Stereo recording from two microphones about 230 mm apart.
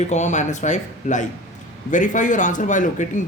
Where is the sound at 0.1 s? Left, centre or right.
Left.